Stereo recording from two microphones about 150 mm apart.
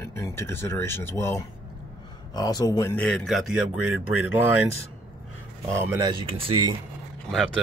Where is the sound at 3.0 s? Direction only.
Centre (ahead or behind); by 4.6 s 15° right (ahead or behind).